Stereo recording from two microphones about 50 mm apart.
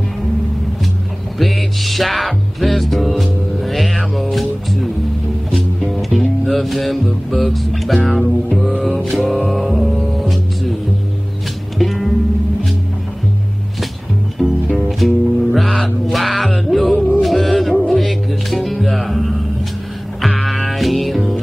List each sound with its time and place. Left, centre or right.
1.4 s music: centre
5.5 s music: centre
11.8 s music: centre
14.4 s music: centre
14.9 s music: centre